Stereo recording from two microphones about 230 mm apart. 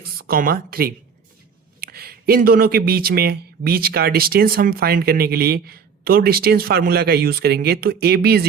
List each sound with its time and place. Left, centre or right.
0.0 s speech: right